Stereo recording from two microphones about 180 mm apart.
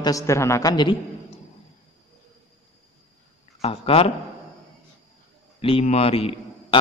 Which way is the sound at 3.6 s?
30° left (ahead or behind).